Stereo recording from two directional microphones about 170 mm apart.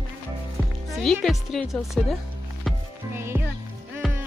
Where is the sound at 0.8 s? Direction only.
Centre (ahead or behind).